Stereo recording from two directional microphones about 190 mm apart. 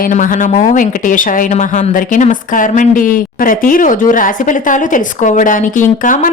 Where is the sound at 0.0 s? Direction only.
45° left (ahead or behind).